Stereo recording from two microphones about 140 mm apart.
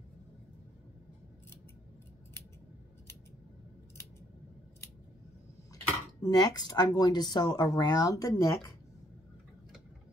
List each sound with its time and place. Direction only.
6.2 s speech: 25° left (ahead or behind)